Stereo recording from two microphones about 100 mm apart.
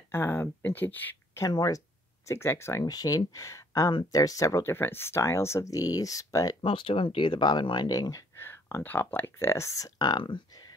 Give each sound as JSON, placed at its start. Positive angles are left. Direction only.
{"t": 0.1, "sound": "speech", "side_deg": 20}
{"t": 1.5, "sound": "speech", "side_deg": 40}
{"t": 2.2, "sound": "speech", "side_deg": 25}
{"t": 2.8, "sound": "speech", "side_deg": 40}
{"t": 6.6, "sound": "speech", "side_deg": 60}
{"t": 7.9, "sound": "speech", "side_deg": 35}
{"t": 8.5, "sound": "speech", "side_deg": 20}
{"t": 9.9, "sound": "speech", "side_deg": 50}